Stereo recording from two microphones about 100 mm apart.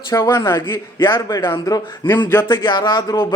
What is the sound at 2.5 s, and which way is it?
Speech, 50° left (ahead or behind).